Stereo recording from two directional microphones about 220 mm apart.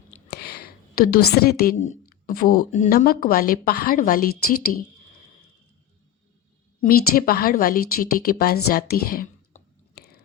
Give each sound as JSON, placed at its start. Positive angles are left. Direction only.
{"t": 0.3, "sound": "a sound", "side_deg": 45}
{"t": 2.7, "sound": "a woman's voice", "side_deg": 35}
{"t": 6.8, "sound": "a woman's voice", "side_deg": 40}